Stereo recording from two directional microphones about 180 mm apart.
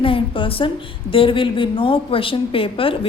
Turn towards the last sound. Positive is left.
turn(degrees=30)  # may be behind; listen again after turning